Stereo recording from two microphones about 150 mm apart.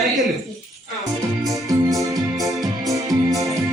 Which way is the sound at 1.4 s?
Centre (ahead or behind).